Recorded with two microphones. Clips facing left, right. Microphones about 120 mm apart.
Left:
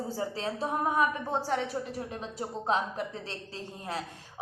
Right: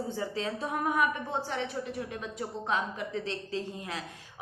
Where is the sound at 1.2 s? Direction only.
40° left (ahead or behind).